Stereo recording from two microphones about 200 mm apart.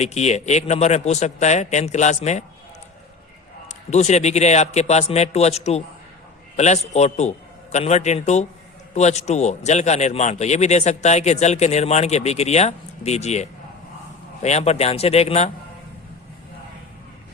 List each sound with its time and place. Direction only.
0.0 s a man's voice: 35° left (ahead or behind)
3.7 s a man's voice: 35° left (ahead or behind)